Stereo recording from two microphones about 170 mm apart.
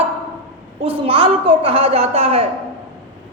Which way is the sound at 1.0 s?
30° right (ahead or behind).